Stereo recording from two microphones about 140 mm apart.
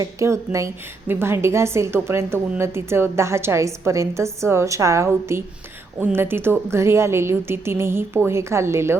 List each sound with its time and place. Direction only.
0.0 s a woman's voice: 20° right (ahead or behind)